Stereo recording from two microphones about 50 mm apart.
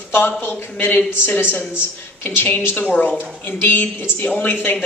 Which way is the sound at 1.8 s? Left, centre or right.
Left.